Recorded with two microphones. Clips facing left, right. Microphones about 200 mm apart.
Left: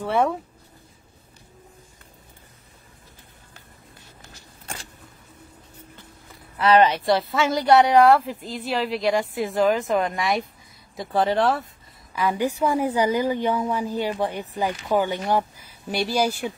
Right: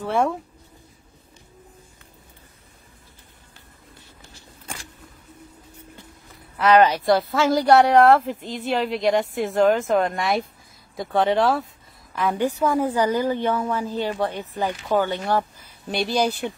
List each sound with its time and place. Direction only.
0.0 s speech: centre (ahead or behind)
6.6 s speech: centre (ahead or behind)
12.4 s a woman's voice: 10° left (ahead or behind)